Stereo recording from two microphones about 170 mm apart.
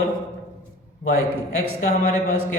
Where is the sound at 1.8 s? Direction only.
40° left (ahead or behind).